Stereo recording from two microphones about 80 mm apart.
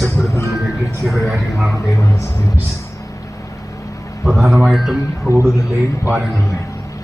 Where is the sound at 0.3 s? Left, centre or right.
Left.